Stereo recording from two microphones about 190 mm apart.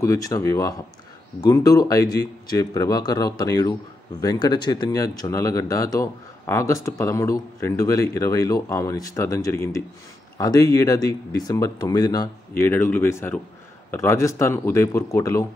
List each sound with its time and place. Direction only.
0.0 s speech: 15° left (ahead or behind)